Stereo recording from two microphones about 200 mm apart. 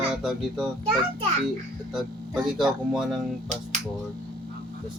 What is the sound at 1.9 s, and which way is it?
A man's voice, centre (ahead or behind).